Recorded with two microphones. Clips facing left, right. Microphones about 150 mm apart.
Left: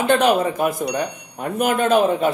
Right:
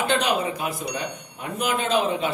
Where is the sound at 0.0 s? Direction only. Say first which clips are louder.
Left 6 dB; 50° left (ahead or behind).